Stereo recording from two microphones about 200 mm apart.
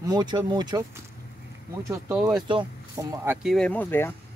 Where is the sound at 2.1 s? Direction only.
5° right (ahead or behind).